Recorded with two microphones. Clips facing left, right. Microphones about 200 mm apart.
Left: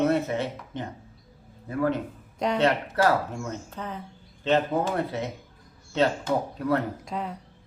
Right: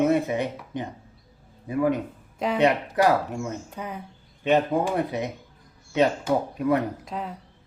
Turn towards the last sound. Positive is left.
turn(degrees=0)  # may be behind; listen again after turning